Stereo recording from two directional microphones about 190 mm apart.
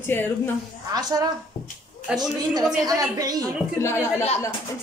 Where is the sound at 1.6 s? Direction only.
20° left (ahead or behind).